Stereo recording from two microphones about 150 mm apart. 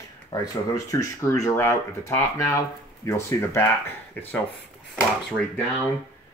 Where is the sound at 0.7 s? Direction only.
20° left (ahead or behind).